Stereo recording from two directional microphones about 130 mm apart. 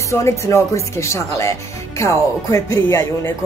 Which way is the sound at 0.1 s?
20° left (ahead or behind).